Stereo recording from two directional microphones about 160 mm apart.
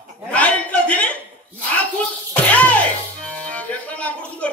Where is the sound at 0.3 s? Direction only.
10° left (ahead or behind).